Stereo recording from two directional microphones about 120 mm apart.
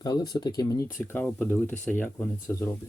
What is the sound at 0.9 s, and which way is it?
Speech, 20° left (ahead or behind).